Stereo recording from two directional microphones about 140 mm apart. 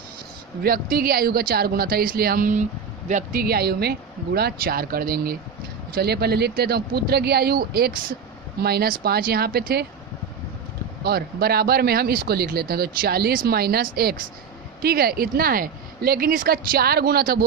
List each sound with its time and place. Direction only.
0.6 s speech: 90° right
11.1 s speech: 90° right